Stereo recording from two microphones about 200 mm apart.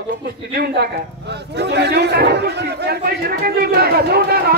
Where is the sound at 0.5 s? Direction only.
50° right (ahead or behind).